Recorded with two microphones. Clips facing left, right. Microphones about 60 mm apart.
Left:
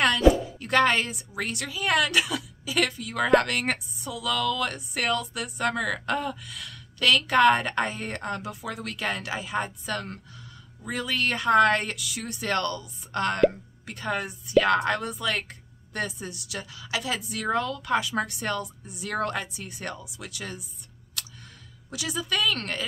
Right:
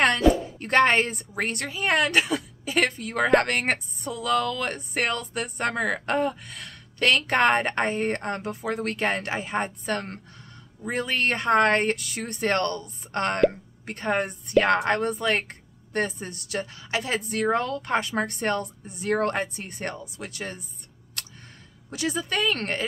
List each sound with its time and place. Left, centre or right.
0.2 s chopping: centre
0.6 s speech: right
21.9 s speech: right